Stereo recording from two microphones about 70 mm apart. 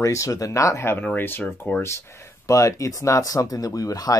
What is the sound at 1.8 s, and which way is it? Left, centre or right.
Speech, left.